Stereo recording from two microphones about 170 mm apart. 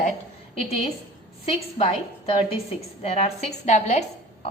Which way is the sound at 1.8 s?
35° left (ahead or behind).